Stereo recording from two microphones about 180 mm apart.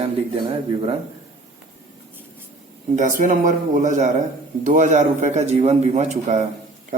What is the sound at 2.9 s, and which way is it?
A man's voice, 45° right (ahead or behind).